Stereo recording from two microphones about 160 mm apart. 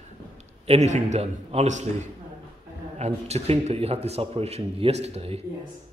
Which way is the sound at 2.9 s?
45° right (ahead or behind).